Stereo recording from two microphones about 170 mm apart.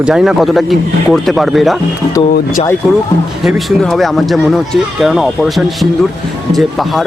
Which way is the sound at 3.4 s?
Centre (ahead or behind).